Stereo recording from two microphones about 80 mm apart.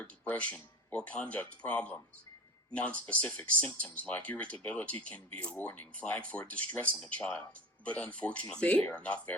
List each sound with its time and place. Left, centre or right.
0.0 s speech: centre